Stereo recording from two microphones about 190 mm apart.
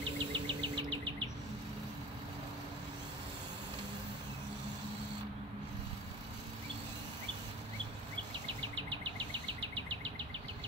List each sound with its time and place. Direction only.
0.0 s insect: 25° right (ahead or behind)